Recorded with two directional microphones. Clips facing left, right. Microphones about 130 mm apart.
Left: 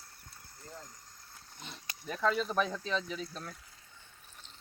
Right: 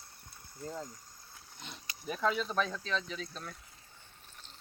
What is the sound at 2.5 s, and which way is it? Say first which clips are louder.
Speech: left 1 dB; 10° left (ahead or behind).